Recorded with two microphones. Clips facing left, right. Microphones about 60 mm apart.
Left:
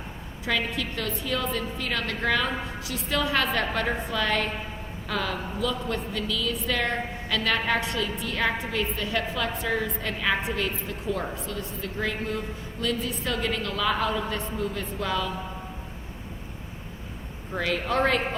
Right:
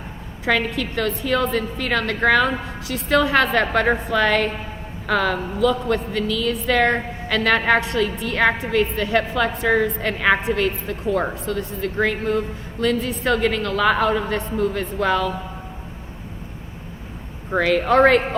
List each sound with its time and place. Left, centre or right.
0.4 s a woman's voice: right
17.5 s a woman's voice: right